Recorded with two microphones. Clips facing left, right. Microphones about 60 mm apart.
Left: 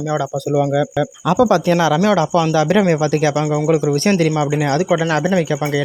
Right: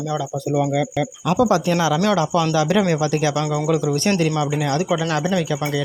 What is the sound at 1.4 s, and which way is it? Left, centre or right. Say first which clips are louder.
Speech: left 4 dB; left.